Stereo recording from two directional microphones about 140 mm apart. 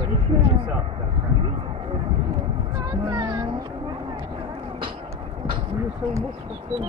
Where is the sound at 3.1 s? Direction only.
30° right (ahead or behind).